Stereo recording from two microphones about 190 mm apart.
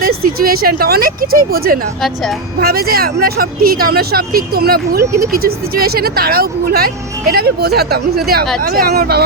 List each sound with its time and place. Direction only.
0.2 s speech: 50° right (ahead or behind)